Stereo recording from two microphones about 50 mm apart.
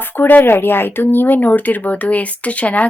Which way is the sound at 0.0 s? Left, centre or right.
Left.